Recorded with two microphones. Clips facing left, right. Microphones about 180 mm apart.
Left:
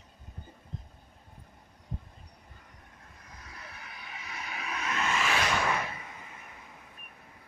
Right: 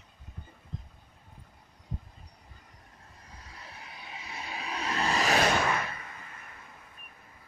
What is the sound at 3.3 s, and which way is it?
Vehicle, 30° right (ahead or behind).